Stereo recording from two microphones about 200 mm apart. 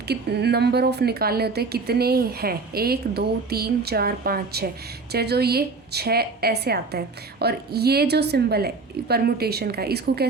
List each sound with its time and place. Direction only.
0.1 s a woman's voice: 55° right (ahead or behind)